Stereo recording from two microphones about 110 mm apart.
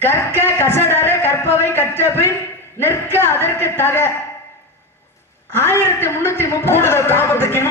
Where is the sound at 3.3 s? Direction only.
20° left (ahead or behind).